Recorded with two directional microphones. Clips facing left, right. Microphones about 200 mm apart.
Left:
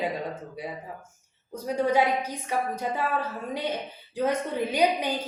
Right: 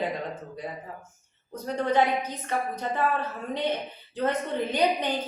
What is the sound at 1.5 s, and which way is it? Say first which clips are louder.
A woman's voice: left 2 dB; 10° left (ahead or behind).